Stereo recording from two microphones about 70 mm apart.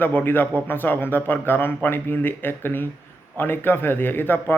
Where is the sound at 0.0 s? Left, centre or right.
Left.